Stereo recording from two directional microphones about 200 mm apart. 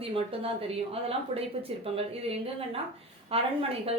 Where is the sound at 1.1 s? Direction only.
30° right (ahead or behind).